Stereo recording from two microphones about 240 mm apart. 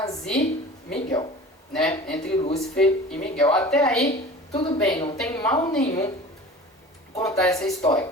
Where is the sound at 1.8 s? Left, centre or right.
Left.